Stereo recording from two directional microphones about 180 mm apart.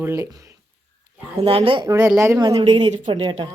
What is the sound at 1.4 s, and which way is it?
Speech, 30° right (ahead or behind).